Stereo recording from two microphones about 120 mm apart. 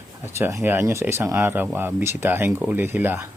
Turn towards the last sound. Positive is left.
turn(degrees=-15)  # may be behind; listen again after turning